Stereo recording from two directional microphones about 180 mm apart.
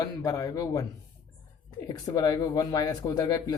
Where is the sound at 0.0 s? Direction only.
20° left (ahead or behind).